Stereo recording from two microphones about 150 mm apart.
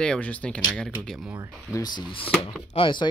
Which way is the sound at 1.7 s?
30° left (ahead or behind).